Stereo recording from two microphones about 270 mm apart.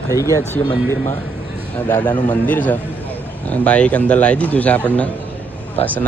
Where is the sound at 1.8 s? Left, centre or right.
Centre.